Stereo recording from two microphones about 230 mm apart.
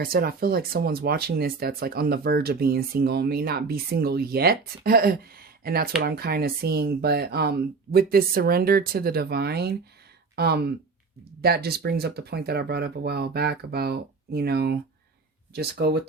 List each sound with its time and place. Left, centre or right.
0.0 s speech: right